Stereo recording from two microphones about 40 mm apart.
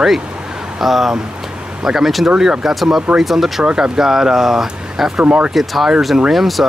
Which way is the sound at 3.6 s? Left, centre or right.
Centre.